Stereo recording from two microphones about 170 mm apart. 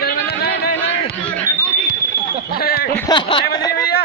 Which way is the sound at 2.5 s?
65° left (ahead or behind).